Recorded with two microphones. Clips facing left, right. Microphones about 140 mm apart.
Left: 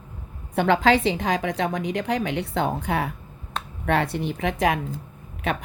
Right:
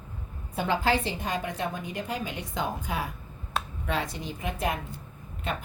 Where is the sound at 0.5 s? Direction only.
70° left (ahead or behind).